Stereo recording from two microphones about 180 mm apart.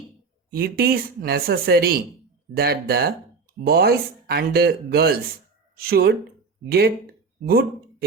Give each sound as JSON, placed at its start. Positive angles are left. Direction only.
{"t": 0.5, "sound": "speech", "side_deg": -55}